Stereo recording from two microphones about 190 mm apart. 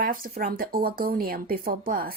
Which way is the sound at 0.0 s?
50° right (ahead or behind).